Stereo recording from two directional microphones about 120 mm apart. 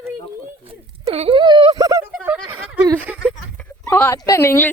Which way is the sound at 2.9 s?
10° right (ahead or behind).